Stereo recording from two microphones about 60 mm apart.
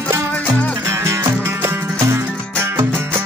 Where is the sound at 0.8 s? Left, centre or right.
Right.